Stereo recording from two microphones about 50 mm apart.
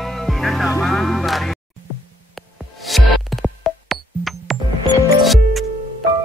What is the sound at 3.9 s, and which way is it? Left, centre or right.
Music, centre.